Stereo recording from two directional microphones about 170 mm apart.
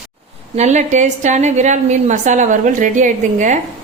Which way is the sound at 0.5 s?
45° right (ahead or behind).